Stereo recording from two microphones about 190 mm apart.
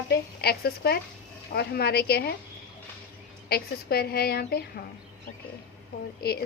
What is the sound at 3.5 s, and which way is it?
A woman's voice, 55° left (ahead or behind).